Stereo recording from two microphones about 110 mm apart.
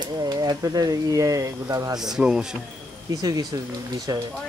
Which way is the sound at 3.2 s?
40° right (ahead or behind).